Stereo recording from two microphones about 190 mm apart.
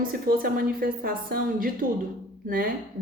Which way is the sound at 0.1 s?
50° right (ahead or behind).